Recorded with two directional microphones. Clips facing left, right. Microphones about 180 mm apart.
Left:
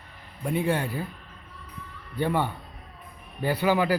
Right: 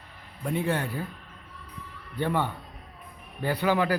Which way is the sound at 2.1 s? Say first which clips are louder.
Left 1 dB; 10° left (ahead or behind).